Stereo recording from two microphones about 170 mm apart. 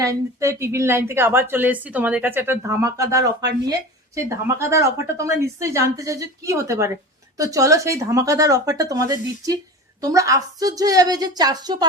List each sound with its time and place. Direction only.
0.0 s speech: 20° right (ahead or behind)